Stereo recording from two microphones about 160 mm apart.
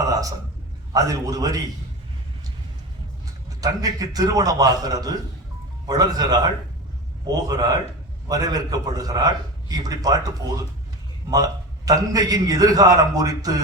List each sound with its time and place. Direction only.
0.1 s a sound: 20° right (ahead or behind)
0.9 s a man's voice: 20° right (ahead or behind)
3.6 s a man's voice: 25° right (ahead or behind)